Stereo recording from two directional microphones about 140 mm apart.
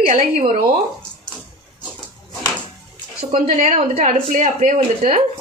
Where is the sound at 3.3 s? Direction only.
50° right (ahead or behind); by 4.9 s 65° right (ahead or behind).